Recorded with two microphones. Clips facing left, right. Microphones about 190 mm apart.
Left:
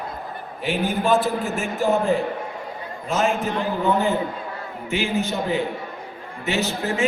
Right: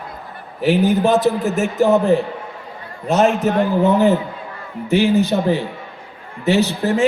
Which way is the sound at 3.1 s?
70° right (ahead or behind).